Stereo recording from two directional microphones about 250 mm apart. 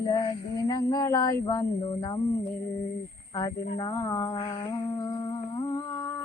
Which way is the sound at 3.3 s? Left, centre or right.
Centre.